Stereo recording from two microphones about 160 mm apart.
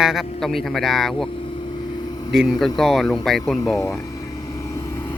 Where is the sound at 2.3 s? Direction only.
Centre (ahead or behind).